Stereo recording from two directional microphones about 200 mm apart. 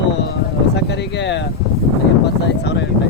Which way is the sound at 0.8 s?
60° left (ahead or behind).